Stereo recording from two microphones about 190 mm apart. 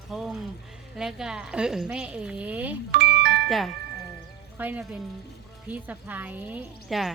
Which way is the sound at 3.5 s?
Centre (ahead or behind).